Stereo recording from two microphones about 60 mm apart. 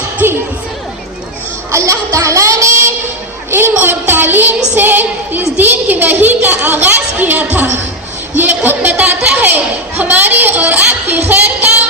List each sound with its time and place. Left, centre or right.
0.2 s music: right
1.7 s child singing: right
3.5 s music: right
8.4 s a woman's voice: right